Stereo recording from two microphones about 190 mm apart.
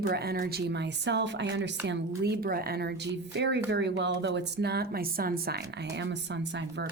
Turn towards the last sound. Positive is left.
turn(degrees=-65)  # may be behind; listen again after turning